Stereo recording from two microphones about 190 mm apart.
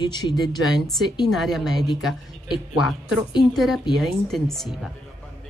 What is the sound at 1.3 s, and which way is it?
A woman's voice, centre (ahead or behind).